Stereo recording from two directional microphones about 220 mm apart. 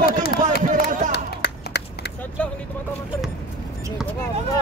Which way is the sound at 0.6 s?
35° right (ahead or behind).